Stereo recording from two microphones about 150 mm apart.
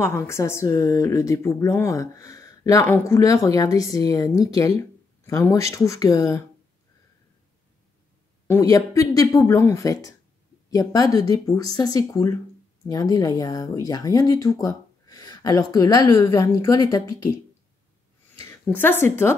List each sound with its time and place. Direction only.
0.0 s speech: 20° left (ahead or behind)
8.5 s speech: 20° left (ahead or behind)
18.4 s speech: 15° left (ahead or behind)